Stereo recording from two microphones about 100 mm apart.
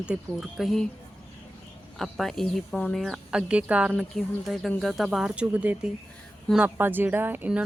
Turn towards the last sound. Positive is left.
turn(degrees=-15)  # may be behind; listen again after turning